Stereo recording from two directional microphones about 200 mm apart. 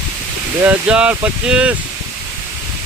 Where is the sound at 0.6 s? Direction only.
5° right (ahead or behind).